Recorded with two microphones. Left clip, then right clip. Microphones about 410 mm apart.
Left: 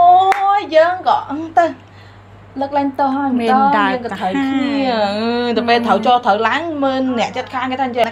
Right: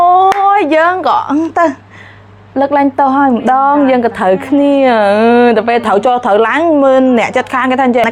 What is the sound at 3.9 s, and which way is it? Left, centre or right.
A woman's voice, right.